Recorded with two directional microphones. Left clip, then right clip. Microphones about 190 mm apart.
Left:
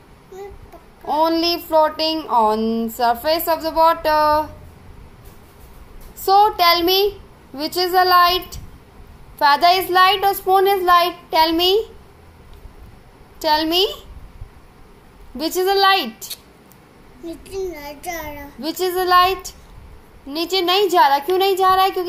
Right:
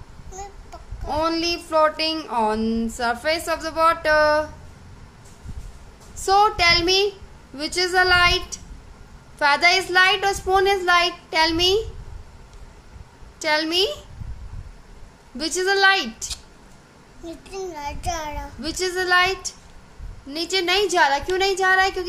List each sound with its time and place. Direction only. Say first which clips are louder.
1.0 s speech: left 5 dB; 5° right (ahead or behind)
6.2 s a child's voice: left 3 dB; 5° right (ahead or behind)
13.4 s speech: left 4 dB; centre (ahead or behind)
15.3 s speech: left 3 dB; 5° right (ahead or behind)
17.5 s child singing: left 2 dB; 25° right (ahead or behind)
18.6 s speech: left 4 dB; 5° right (ahead or behind)